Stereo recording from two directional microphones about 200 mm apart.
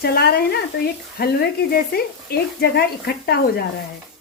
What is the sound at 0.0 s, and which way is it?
Speech, 50° left (ahead or behind).